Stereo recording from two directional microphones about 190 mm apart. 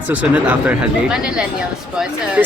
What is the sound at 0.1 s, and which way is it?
Speech, 10° right (ahead or behind).